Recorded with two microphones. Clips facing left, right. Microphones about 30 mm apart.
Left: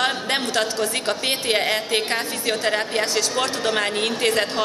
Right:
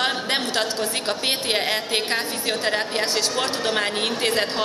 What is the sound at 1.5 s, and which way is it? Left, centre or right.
A man's voice, centre.